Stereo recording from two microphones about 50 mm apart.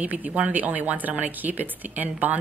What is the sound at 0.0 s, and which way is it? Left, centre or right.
Speech, right.